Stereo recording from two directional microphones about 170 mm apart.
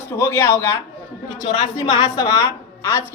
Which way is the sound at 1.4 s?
25° left (ahead or behind).